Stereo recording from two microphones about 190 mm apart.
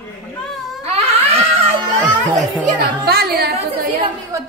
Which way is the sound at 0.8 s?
35° right (ahead or behind).